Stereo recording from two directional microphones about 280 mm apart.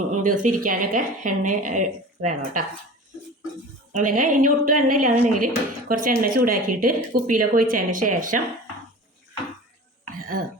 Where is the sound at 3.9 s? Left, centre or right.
Right.